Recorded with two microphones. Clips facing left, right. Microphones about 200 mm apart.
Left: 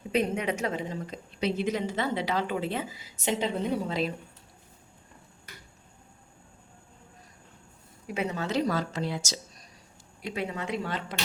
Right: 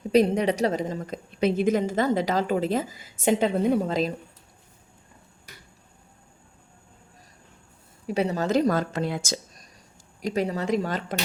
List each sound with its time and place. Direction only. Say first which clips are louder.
0.1 s a woman's voice: right 7 dB; 35° right (ahead or behind)
8.0 s a woman's voice: right 6 dB; 35° right (ahead or behind)